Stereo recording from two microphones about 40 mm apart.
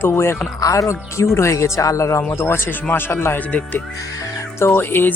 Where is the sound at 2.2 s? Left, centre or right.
Left.